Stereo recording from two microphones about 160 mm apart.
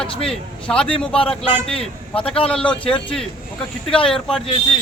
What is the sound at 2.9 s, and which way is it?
Speech, 5° left (ahead or behind).